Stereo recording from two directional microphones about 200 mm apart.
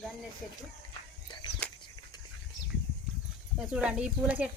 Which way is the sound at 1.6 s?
5° left (ahead or behind).